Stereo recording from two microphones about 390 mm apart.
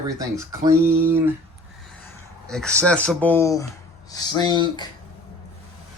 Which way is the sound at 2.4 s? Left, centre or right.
Centre.